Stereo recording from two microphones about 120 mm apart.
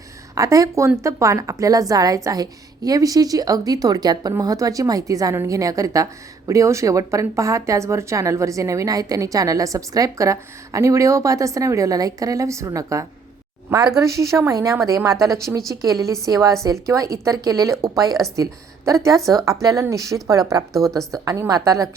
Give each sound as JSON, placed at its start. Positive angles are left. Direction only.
{"t": 0.3, "sound": "a woman's voice", "side_deg": -30}
{"t": 20.7, "sound": "a woman's voice", "side_deg": 5}
{"t": 21.2, "sound": "a woman's voice", "side_deg": -30}